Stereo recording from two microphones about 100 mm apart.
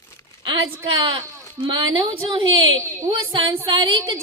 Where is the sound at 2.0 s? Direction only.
55° right (ahead or behind).